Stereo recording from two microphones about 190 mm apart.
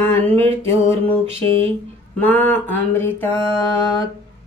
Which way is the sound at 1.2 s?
30° right (ahead or behind).